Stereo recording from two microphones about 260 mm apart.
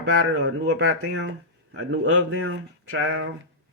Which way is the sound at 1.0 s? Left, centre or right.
Right.